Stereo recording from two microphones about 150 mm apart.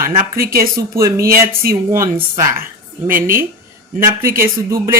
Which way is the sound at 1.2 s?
75° right (ahead or behind).